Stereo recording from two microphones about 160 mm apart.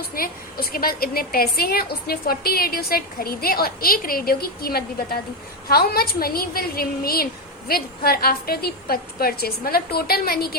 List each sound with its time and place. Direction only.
0.1 s a woman's voice: 70° left (ahead or behind)